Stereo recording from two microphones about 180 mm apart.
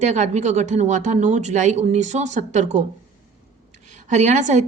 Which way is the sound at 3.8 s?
40° right (ahead or behind).